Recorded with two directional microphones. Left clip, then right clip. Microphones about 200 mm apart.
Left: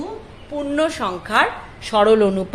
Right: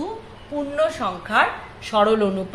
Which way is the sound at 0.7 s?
45° left (ahead or behind).